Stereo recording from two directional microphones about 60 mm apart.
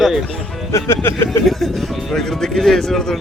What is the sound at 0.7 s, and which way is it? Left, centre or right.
Speech, left.